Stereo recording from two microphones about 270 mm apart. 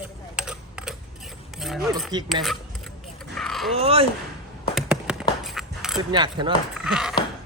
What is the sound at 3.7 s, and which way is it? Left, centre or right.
Speech, right.